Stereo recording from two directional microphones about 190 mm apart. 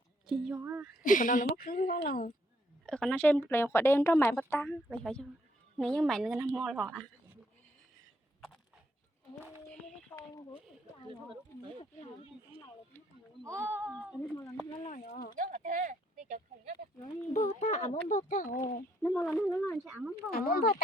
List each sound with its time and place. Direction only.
0.3 s a woman's voice: centre (ahead or behind)
0.5 s speech: 10° right (ahead or behind)
1.0 s speech: 45° left (ahead or behind)
2.8 s a woman's voice: 5° left (ahead or behind)
10.1 s a sound: 20° left (ahead or behind)
13.4 s speech: 15° right (ahead or behind)
14.2 s speech: 15° left (ahead or behind)
14.7 s speech: 35° left (ahead or behind)
15.4 s speech: 45° right (ahead or behind)
17.3 s speech: 35° left (ahead or behind)
19.0 s a woman's voice: 10° left (ahead or behind)
20.3 s speech: 50° left (ahead or behind)